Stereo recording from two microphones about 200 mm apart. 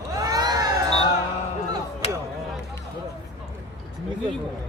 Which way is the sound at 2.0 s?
30° left (ahead or behind).